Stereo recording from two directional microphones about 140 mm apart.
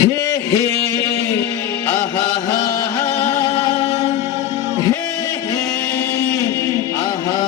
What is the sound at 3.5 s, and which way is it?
Music, 45° left (ahead or behind).